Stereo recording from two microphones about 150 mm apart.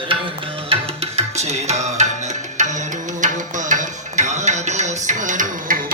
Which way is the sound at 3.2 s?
55° right (ahead or behind).